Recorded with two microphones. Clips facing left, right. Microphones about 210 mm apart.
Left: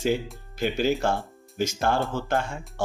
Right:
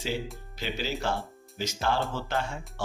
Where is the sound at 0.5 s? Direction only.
50° left (ahead or behind).